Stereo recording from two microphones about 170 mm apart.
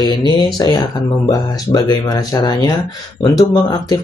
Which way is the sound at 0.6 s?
20° left (ahead or behind).